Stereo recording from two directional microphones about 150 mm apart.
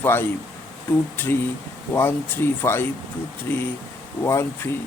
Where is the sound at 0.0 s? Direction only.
15° left (ahead or behind).